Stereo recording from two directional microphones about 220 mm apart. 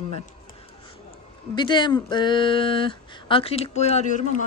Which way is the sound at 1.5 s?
20° left (ahead or behind).